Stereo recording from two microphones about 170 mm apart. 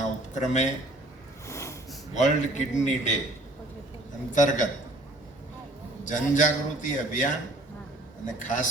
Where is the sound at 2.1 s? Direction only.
45° left (ahead or behind).